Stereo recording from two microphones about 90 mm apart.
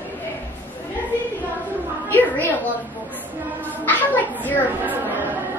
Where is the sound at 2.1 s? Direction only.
20° left (ahead or behind).